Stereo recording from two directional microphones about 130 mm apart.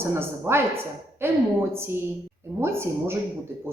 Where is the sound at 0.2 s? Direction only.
20° right (ahead or behind).